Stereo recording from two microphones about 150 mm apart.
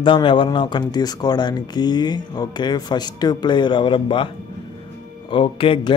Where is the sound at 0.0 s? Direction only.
35° left (ahead or behind).